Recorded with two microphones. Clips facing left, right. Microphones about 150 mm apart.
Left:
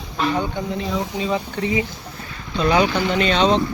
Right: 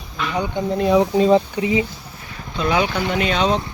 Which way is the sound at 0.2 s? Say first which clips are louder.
Left 5 dB; 35° left (ahead or behind).